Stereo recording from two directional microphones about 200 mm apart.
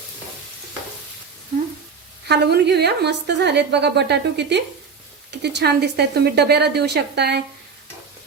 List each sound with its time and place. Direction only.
2.2 s a woman's voice: 55° right (ahead or behind)